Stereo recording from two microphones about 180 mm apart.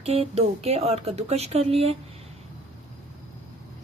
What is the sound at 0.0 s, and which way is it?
A woman's voice, 35° right (ahead or behind).